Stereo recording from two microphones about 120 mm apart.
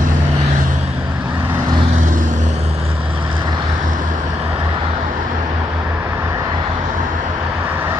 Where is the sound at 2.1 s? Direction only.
90° right.